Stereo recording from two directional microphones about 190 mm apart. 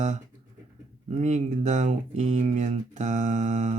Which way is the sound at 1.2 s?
40° right (ahead or behind).